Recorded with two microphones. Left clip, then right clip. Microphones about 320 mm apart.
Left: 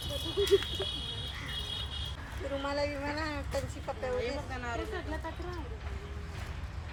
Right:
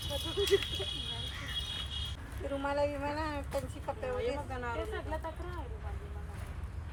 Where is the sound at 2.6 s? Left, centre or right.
Centre.